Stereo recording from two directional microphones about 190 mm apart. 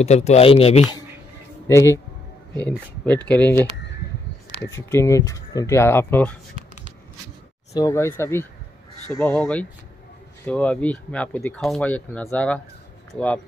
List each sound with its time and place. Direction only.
0.0 s speech: 35° left (ahead or behind)
1.7 s speech: 15° left (ahead or behind)
3.3 s speech: 10° left (ahead or behind)
4.6 s speech: 15° left (ahead or behind)
7.7 s speech: 15° left (ahead or behind)